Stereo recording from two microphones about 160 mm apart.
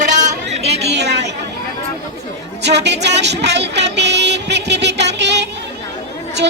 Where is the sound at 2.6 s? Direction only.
90° right.